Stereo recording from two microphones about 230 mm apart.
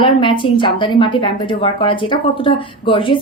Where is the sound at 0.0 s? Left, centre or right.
Left.